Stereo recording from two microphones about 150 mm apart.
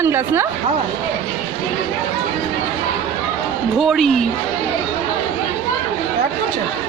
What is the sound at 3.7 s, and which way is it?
Speech, centre (ahead or behind).